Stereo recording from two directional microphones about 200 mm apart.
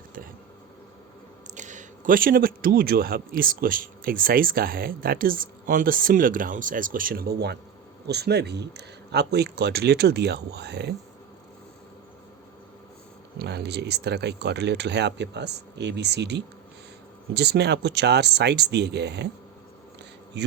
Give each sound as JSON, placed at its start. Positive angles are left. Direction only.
{"t": 1.5, "sound": "speech", "side_deg": -40}
{"t": 13.4, "sound": "speech", "side_deg": -55}
{"t": 20.4, "sound": "speech", "side_deg": -60}